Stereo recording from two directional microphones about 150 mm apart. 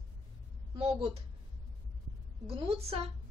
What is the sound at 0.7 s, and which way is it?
Speech, 40° right (ahead or behind).